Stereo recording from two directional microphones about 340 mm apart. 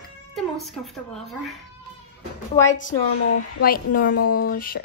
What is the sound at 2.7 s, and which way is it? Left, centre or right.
Speech, left.